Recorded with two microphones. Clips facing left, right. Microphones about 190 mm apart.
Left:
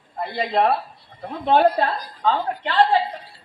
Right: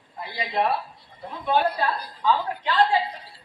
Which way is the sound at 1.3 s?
60° left (ahead or behind).